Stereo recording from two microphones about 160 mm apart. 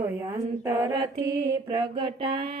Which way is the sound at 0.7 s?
15° right (ahead or behind).